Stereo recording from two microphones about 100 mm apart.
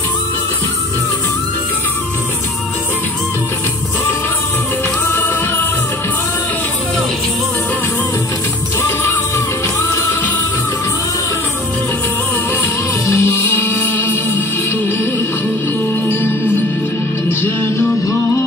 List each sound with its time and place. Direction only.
13.0 s music: 25° left (ahead or behind)
16.1 s music: 25° left (ahead or behind)
17.4 s music: 25° left (ahead or behind)